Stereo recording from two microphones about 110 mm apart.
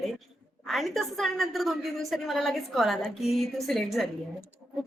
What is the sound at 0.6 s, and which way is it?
A woman's voice, centre (ahead or behind).